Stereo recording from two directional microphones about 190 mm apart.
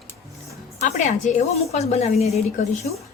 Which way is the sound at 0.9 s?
40° left (ahead or behind).